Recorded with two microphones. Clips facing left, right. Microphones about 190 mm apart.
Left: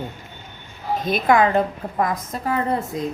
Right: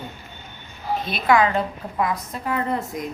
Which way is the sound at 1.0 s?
50° left (ahead or behind).